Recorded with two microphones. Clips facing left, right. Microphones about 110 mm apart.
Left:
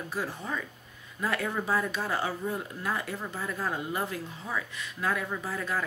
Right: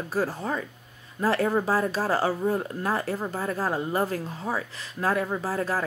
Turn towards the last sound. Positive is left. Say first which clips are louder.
# right 5 dB
turn(degrees=-35)  # may be behind; listen again after turning